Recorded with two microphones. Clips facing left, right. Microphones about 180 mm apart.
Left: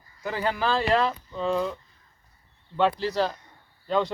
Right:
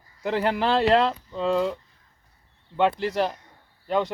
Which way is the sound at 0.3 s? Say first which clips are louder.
Right 3 dB; 65° right (ahead or behind).